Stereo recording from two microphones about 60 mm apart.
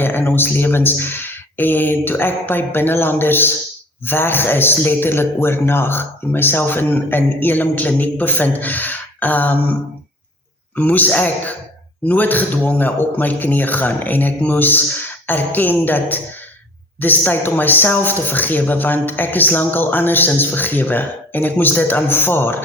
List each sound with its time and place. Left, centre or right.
0.0 s speech: left
10.8 s a man's voice: left